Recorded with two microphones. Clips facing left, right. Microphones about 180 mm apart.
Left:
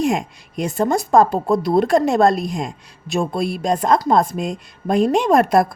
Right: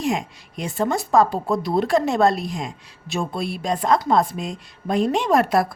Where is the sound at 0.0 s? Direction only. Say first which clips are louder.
Left 4 dB; 50° left (ahead or behind).